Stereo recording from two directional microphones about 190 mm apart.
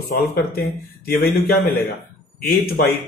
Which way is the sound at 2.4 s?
50° left (ahead or behind).